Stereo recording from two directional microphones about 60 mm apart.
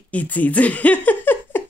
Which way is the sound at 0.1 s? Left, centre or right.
Left.